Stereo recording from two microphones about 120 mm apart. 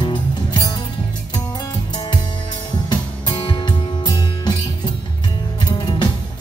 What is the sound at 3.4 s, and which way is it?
Music, 40° left (ahead or behind).